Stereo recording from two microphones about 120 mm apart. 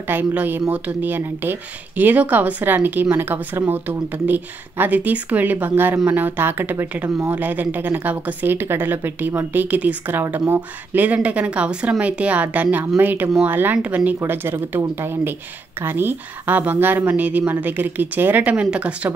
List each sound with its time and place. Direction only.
0.1 s speech: 15° right (ahead or behind)